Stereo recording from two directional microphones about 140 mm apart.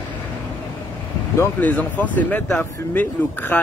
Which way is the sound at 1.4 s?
10° left (ahead or behind).